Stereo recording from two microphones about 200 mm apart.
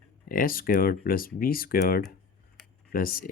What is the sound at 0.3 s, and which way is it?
Speech, 45° left (ahead or behind).